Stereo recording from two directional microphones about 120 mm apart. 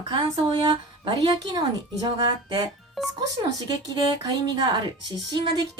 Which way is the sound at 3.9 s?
35° right (ahead or behind).